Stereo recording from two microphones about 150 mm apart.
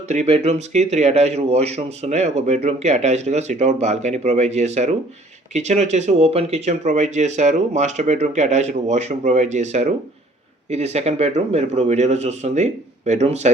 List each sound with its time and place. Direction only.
0.1 s speech: 45° right (ahead or behind)